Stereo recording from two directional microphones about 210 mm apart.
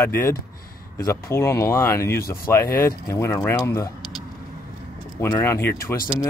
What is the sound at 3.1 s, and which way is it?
Speech, 15° left (ahead or behind).